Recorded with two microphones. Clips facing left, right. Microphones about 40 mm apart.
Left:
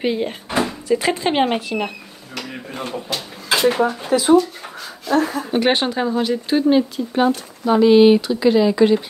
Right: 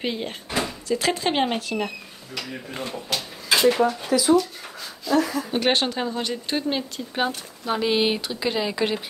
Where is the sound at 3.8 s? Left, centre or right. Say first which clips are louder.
Left 3 dB; left.